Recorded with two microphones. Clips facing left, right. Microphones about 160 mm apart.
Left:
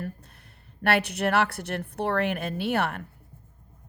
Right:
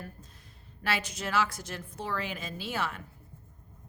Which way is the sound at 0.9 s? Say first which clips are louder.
Left 9 dB; 65° left (ahead or behind).